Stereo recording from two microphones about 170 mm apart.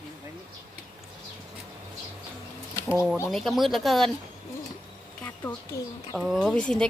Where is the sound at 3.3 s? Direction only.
Centre (ahead or behind).